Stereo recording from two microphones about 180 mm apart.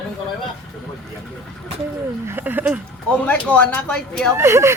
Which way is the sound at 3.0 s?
5° left (ahead or behind).